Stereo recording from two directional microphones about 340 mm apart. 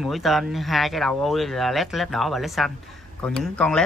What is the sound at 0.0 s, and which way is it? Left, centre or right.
Speech, centre.